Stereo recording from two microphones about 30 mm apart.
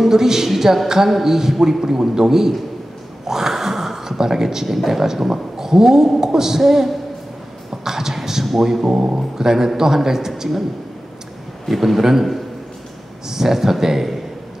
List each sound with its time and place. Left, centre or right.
0.0 s a man's voice: centre
3.3 s gasp: centre
4.7 s a man's voice: centre
7.8 s a sound: centre
8.9 s speech: right
9.4 s a man's voice: centre
11.6 s a man's voice: centre
13.3 s a man's voice: centre